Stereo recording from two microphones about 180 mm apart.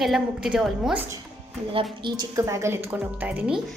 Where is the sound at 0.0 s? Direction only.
Centre (ahead or behind).